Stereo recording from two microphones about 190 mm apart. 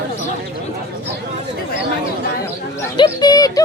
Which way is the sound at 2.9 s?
20° left (ahead or behind).